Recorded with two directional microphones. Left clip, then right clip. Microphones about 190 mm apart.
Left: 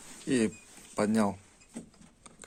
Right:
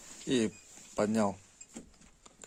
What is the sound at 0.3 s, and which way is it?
Speech, 25° right (ahead or behind).